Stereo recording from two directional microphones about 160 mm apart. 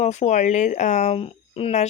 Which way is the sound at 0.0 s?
50° left (ahead or behind).